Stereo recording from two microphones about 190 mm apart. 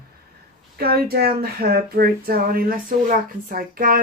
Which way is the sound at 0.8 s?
55° right (ahead or behind).